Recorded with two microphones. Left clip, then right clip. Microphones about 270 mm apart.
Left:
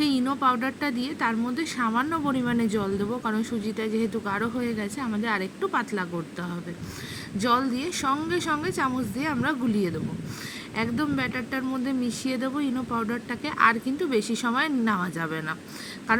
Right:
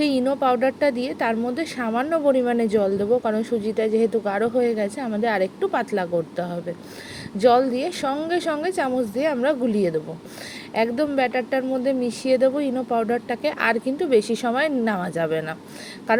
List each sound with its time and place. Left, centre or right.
0.0 s speech: centre